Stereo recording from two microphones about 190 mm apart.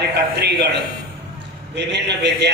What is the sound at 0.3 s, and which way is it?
A man's voice, 60° right (ahead or behind).